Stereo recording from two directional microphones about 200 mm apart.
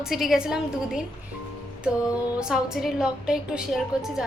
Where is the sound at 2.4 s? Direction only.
5° right (ahead or behind).